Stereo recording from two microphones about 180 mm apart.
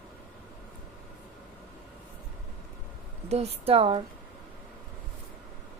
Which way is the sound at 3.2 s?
35° right (ahead or behind).